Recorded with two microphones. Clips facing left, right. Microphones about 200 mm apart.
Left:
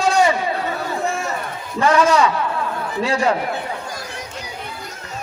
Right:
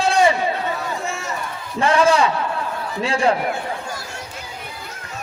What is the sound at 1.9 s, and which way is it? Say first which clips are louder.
Speech: even; 30° right (ahead or behind).